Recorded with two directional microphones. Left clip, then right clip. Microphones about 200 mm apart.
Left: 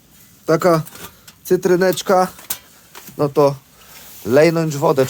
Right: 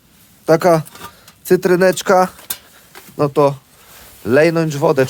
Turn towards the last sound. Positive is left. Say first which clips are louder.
# right 2 dB
turn(degrees=-15)  # may be behind; listen again after turning